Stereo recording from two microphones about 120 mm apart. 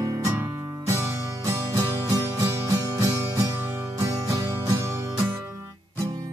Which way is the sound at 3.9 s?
30° right (ahead or behind).